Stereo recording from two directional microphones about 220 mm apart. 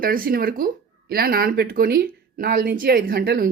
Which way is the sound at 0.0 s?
40° right (ahead or behind).